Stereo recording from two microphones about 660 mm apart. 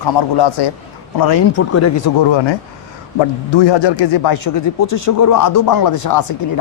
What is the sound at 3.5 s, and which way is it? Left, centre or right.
Speech, left.